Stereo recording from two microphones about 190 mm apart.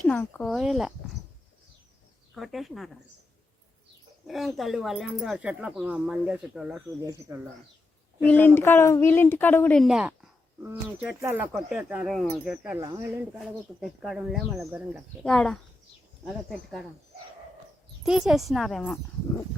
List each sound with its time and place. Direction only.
0.0 s speech: 10° left (ahead or behind)
2.3 s speech: centre (ahead or behind)
4.3 s speech: centre (ahead or behind)
7.0 s speech: 20° right (ahead or behind)
8.3 s speech: 10° left (ahead or behind); by 15.0 s 10° right (ahead or behind)
15.2 s speech: 5° left (ahead or behind)
18.0 s speech: centre (ahead or behind)